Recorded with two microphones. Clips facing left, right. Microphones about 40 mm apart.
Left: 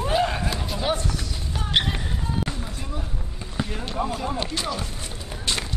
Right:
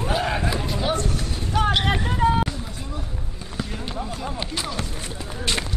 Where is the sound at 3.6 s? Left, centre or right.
Centre.